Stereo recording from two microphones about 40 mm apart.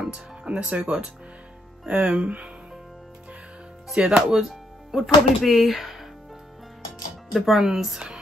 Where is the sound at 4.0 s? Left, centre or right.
Centre.